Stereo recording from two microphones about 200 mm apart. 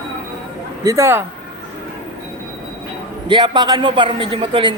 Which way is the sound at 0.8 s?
15° right (ahead or behind).